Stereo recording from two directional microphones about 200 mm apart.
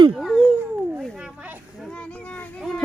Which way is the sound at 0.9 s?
5° right (ahead or behind).